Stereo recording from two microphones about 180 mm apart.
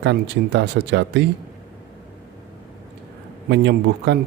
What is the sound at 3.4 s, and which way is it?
Speech, 75° right (ahead or behind).